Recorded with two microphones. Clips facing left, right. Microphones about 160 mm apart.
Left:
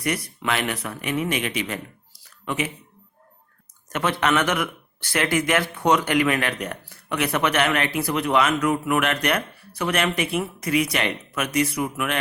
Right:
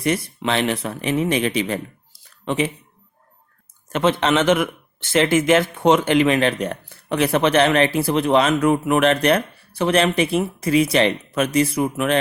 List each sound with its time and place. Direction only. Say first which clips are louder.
0.0 s speech: right 5 dB; 25° right (ahead or behind)
3.8 s speech: right 4 dB; 25° right (ahead or behind)